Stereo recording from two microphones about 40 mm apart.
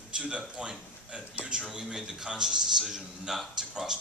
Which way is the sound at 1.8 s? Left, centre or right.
Centre.